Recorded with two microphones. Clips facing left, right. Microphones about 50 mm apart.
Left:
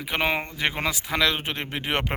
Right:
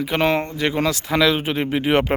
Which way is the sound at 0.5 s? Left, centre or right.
Left.